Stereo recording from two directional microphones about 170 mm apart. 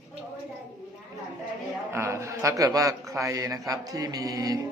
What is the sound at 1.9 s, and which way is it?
A man's voice, 15° right (ahead or behind).